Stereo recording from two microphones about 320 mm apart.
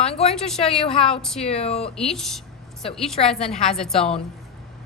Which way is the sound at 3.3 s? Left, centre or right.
Centre.